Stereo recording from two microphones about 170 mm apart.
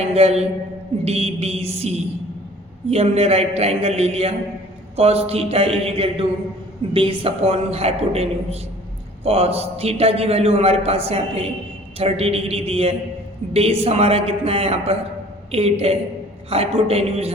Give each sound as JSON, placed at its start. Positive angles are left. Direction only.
{"t": 0.0, "sound": "a man's voice", "side_deg": -40}
{"t": 2.9, "sound": "a man's voice", "side_deg": -35}